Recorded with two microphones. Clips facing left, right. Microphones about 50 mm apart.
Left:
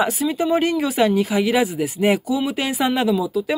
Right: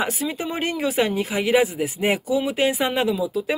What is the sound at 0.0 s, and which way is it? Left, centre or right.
Speech, centre.